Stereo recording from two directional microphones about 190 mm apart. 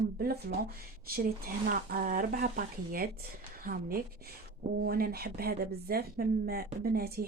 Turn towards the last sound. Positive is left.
turn(degrees=-55)  # may be behind; listen again after turning